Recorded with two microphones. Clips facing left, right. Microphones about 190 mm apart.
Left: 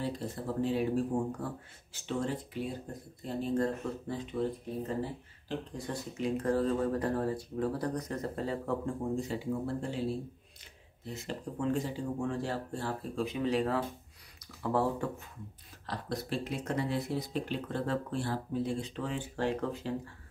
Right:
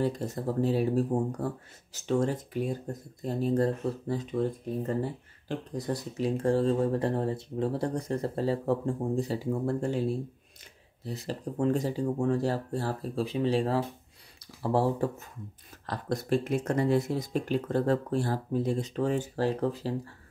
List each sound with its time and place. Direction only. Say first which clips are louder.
0.0 s speech: right 6 dB; 40° right (ahead or behind)
5.8 s speech: right 9 dB; 35° right (ahead or behind)
11.1 s speech: right 4 dB; 35° right (ahead or behind)
15.9 s speech: right 7 dB; 50° right (ahead or behind)